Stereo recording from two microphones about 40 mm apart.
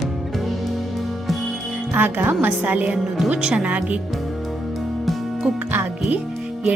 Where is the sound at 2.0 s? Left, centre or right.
Right.